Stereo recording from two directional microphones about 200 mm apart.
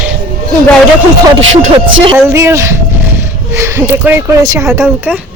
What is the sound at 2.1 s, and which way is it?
Speech, 10° right (ahead or behind).